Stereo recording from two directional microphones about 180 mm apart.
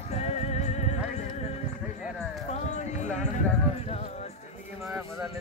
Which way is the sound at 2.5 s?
40° left (ahead or behind).